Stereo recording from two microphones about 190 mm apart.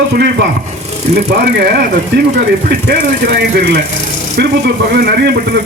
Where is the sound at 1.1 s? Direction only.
55° right (ahead or behind).